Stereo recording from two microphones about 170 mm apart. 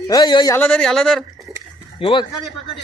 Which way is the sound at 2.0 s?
30° left (ahead or behind).